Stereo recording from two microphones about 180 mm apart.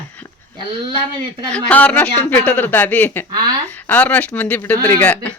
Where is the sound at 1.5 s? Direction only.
5° left (ahead or behind).